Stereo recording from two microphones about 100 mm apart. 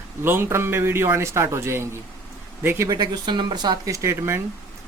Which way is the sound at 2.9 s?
45° right (ahead or behind).